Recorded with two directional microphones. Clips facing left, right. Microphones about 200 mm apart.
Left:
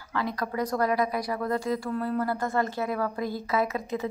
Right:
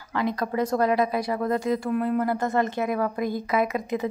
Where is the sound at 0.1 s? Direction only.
20° right (ahead or behind).